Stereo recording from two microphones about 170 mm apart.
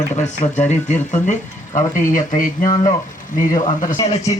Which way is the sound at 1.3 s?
50° left (ahead or behind).